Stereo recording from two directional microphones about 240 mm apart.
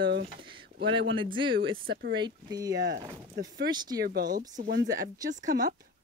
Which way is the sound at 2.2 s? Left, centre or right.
Centre.